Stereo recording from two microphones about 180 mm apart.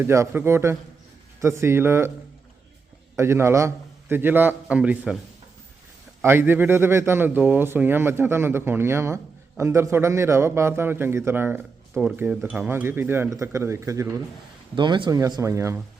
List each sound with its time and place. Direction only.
0.0 s a man's voice: 15° right (ahead or behind)
3.2 s a man's voice: 15° right (ahead or behind)
6.2 s a man's voice: 10° right (ahead or behind)
14.8 s a man's voice: 25° right (ahead or behind)